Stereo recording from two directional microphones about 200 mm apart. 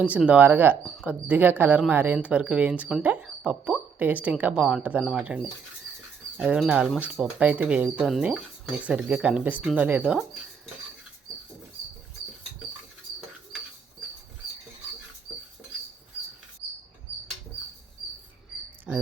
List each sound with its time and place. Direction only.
0.0 s speech: 5° right (ahead or behind)
18.9 s mouse: 5° right (ahead or behind)